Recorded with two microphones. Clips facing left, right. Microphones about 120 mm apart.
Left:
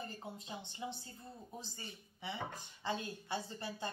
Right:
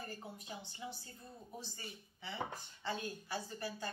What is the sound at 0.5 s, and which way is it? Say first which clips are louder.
Speech: left 3 dB; 25° left (ahead or behind).